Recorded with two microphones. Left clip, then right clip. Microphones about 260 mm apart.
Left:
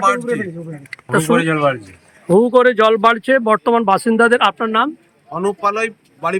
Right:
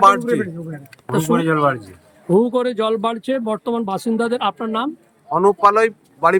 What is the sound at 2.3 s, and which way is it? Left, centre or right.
Speech, centre.